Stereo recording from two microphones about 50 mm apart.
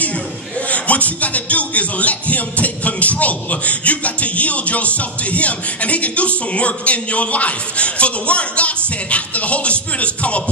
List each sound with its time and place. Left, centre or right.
0.7 s music: left